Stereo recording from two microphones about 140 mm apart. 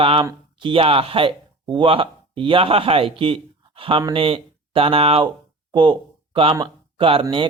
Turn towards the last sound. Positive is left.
turn(degrees=-40)  # may be behind; listen again after turning